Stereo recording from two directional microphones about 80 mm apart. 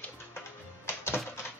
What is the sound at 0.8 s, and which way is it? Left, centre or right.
Music, left.